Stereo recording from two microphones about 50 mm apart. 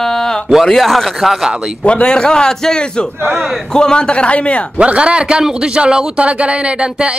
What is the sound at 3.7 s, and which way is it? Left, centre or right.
Speech, centre.